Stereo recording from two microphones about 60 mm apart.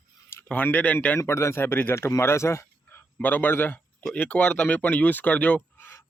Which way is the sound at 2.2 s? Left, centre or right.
Left.